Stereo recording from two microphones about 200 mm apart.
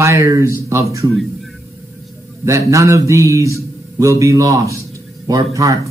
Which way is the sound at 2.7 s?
15° right (ahead or behind).